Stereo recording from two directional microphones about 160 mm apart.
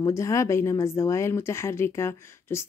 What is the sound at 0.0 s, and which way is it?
A woman's voice, 20° left (ahead or behind).